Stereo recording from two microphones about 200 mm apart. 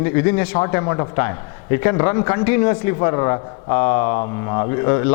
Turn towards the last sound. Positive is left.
turn(degrees=20)  # may be behind; listen again after turning